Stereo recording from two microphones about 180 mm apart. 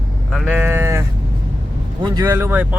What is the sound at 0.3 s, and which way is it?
Sheep, centre (ahead or behind).